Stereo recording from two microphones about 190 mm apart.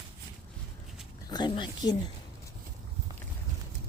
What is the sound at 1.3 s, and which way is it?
Speech, 20° left (ahead or behind).